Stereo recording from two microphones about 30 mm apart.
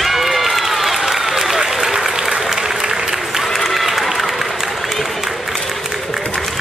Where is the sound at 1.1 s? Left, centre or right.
Centre.